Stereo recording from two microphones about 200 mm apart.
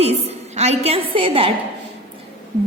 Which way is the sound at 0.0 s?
35° right (ahead or behind).